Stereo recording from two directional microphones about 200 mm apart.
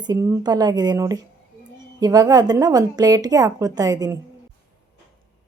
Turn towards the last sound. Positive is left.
turn(degrees=-20)  # may be behind; listen again after turning